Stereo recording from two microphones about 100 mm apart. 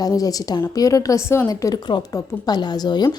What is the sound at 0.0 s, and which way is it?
A woman's voice, 35° left (ahead or behind).